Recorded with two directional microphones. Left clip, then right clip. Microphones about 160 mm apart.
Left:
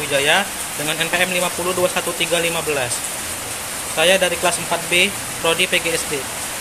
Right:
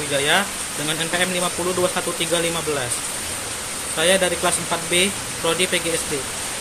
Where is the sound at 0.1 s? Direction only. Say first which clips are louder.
Left 3 dB; 20° right (ahead or behind).